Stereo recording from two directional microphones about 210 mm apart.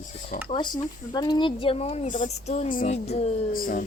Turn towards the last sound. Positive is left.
turn(degrees=40)  # may be behind; listen again after turning